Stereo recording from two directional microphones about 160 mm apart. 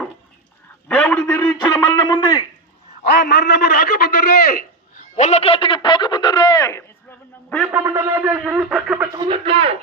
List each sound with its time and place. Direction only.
0.9 s a man's voice: 10° left (ahead or behind)
1.7 s a man's voice: 25° left (ahead or behind)
3.1 s a man's voice: 90° left; by 5.0 s 70° left (ahead or behind)
5.1 s a man's voice: 45° left (ahead or behind); by 6.8 s 20° left (ahead or behind)
7.7 s a man's voice: 15° right (ahead or behind)
9.1 s speech: 25° right (ahead or behind)
9.4 s speech: 35° right (ahead or behind)